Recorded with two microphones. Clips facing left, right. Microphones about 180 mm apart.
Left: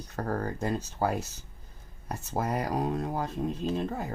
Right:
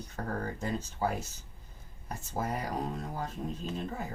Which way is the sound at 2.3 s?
75° left (ahead or behind).